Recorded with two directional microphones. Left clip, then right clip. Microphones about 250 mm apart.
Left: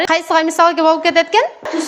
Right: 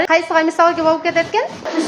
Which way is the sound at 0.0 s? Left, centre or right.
Left.